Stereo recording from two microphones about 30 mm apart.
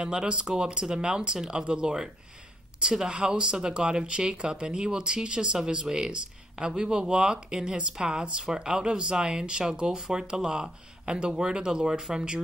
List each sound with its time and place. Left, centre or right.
0.0 s speech: right